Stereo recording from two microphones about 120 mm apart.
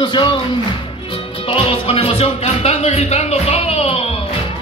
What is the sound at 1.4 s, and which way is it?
Music, 50° left (ahead or behind).